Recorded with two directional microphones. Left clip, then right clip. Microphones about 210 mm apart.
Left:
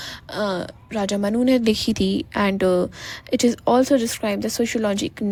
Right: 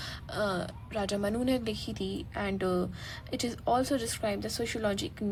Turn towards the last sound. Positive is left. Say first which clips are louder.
# left 9 dB
turn(degrees=35)  # may be behind; listen again after turning